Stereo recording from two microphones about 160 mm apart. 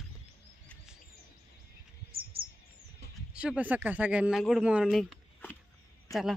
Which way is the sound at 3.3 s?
5° right (ahead or behind).